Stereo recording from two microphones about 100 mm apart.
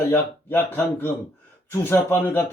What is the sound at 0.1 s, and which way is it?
A man's voice, 20° left (ahead or behind).